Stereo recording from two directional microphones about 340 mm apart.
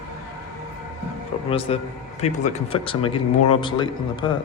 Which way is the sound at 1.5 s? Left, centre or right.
Centre.